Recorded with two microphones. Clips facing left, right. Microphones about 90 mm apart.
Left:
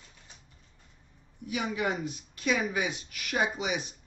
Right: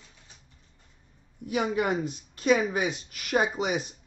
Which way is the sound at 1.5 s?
45° right (ahead or behind).